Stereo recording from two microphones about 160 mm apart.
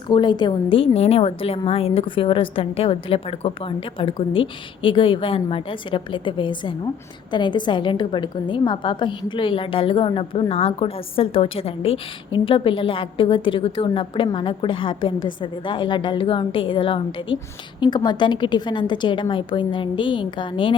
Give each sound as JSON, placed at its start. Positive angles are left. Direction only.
{"t": 0.1, "sound": "a woman's voice", "side_deg": 30}